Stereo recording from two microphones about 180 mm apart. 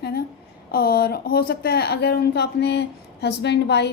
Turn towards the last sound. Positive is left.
turn(degrees=65)  # may be behind; listen again after turning